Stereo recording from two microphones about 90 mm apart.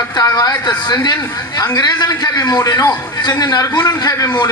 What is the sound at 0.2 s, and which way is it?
A man's voice, 45° left (ahead or behind).